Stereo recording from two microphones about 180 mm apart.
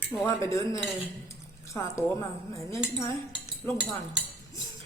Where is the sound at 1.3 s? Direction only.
15° left (ahead or behind).